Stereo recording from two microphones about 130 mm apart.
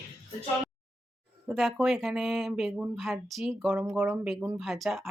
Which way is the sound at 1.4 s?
5° right (ahead or behind).